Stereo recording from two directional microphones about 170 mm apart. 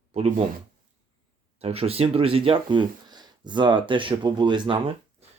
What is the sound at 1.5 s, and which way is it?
Speech, 35° right (ahead or behind).